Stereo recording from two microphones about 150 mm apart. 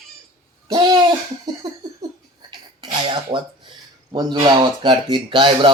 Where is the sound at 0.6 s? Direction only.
25° right (ahead or behind).